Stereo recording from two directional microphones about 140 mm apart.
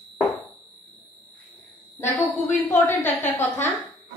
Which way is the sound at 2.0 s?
15° left (ahead or behind).